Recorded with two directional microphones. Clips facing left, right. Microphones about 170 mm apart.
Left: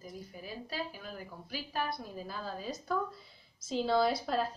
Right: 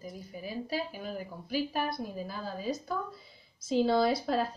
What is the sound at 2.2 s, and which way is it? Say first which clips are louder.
Speech: right 3 dB; 5° right (ahead or behind).